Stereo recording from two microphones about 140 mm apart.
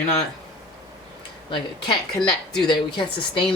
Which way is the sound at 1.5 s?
35° left (ahead or behind).